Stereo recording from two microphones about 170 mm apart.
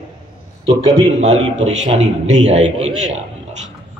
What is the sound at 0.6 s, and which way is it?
A man's voice, 40° right (ahead or behind).